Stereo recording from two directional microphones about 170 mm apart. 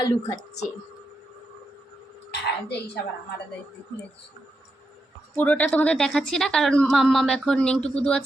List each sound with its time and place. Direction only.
0.0 s a woman's voice: 20° left (ahead or behind)
2.3 s speech: 80° left
5.4 s a woman's voice: 10° left (ahead or behind)